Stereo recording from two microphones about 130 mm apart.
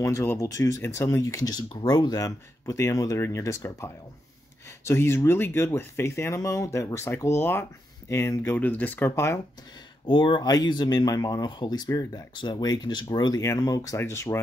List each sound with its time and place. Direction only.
0.0 s speech: 20° left (ahead or behind)
1.7 s speech: 40° left (ahead or behind); by 9.4 s 20° left (ahead or behind)
10.0 s speech: 40° left (ahead or behind); by 14.4 s 20° left (ahead or behind)